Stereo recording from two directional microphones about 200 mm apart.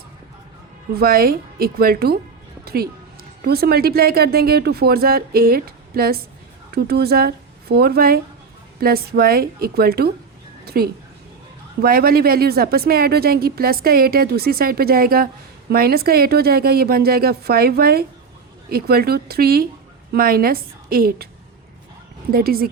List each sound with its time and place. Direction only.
0.9 s a woman's voice: 50° right (ahead or behind)
22.3 s speech: 50° right (ahead or behind)